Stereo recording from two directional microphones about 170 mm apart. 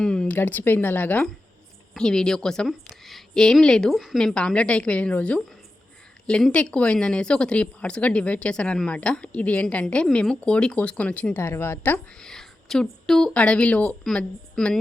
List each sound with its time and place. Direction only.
0.0 s a woman's voice: 5° left (ahead or behind)